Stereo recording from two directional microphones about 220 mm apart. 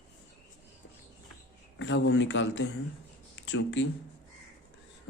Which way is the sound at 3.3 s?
55° left (ahead or behind).